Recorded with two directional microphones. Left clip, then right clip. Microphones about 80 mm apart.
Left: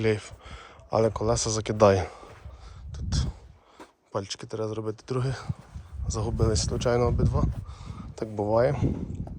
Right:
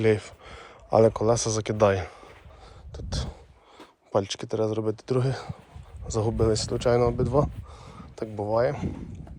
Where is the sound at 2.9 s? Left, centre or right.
Centre.